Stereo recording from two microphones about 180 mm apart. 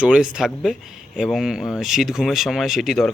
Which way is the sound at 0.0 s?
5° right (ahead or behind).